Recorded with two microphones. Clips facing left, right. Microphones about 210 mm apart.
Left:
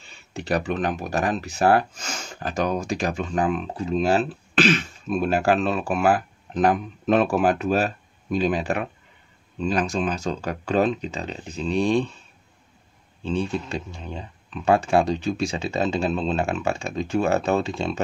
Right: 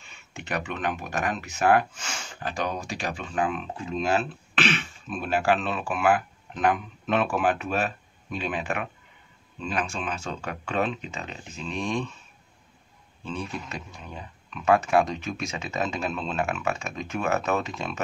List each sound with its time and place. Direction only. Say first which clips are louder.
0.0 s speech: left 7 dB; 35° left (ahead or behind)
13.2 s speech: left 8 dB; 30° left (ahead or behind)